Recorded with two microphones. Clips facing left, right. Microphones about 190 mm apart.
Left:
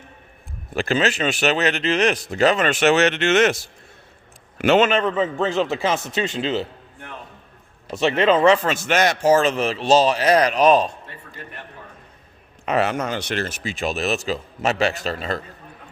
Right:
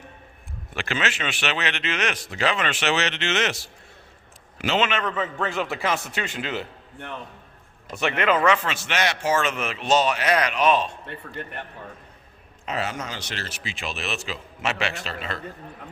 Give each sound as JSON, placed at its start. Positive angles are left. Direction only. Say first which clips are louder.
{"t": 0.7, "sound": "a man's voice", "louder": "left 7 dB", "side_deg": 40}
{"t": 4.9, "sound": "speech", "louder": "left 7 dB", "side_deg": 30}
{"t": 7.9, "sound": "speech", "louder": "left 5 dB", "side_deg": 25}
{"t": 12.6, "sound": "speech", "louder": "left 8 dB", "side_deg": 65}